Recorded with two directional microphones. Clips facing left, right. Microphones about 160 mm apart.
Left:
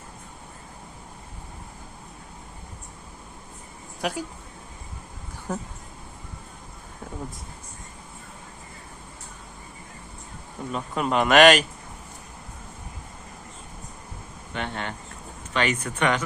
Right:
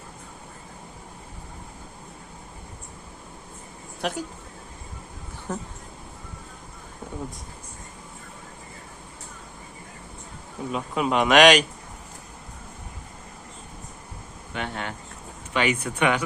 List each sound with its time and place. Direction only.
4.0 s speech: 5° left (ahead or behind)
5.5 s speech: 10° left (ahead or behind)
10.7 s speech: 5° right (ahead or behind)
14.5 s speech: 5° right (ahead or behind)